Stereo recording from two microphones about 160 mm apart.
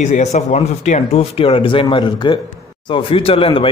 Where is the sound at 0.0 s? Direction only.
45° left (ahead or behind).